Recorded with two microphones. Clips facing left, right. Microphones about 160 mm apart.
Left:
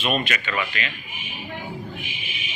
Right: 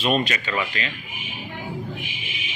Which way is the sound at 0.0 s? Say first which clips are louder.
Right 2 dB; 35° right (ahead or behind).